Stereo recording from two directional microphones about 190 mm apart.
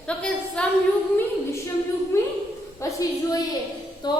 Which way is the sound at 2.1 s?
15° left (ahead or behind).